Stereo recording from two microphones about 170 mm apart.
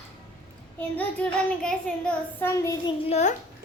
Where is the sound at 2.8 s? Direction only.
35° left (ahead or behind).